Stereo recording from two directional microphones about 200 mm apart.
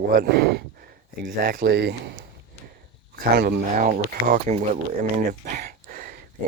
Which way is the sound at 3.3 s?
55° right (ahead or behind).